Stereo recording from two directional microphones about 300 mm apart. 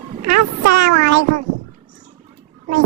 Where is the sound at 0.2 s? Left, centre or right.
Right.